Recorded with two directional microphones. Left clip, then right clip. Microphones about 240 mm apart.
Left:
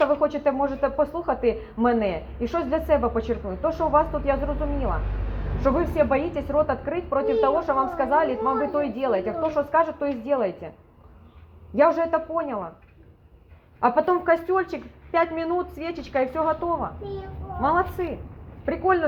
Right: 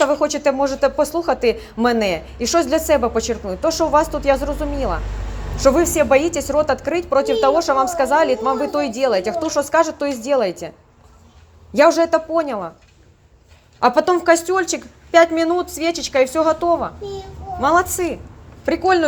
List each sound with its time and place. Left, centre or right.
0.0 s a woman's voice: right
5.7 s a woman's voice: right
11.8 s speech: right
13.7 s a woman's voice: right